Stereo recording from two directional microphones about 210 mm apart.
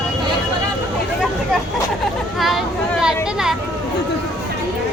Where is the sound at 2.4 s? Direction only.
Centre (ahead or behind).